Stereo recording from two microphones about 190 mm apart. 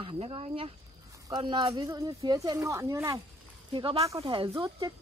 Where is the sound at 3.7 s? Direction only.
25° right (ahead or behind).